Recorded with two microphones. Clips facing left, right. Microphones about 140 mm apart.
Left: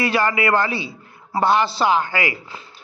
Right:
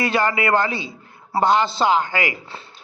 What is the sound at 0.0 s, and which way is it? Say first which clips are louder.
A man's voice: left 1 dB; 25° right (ahead or behind).